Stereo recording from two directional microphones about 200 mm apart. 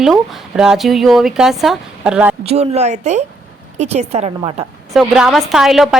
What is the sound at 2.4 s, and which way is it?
A woman's voice, 30° right (ahead or behind).